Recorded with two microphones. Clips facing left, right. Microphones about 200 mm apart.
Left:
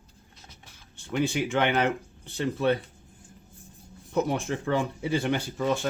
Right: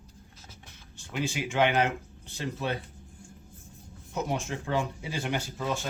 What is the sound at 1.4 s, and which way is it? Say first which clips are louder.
Speech: right 3 dB; 60° left (ahead or behind).